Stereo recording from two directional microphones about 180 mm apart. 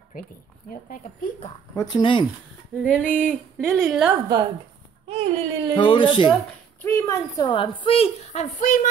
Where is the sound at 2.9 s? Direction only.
5° left (ahead or behind).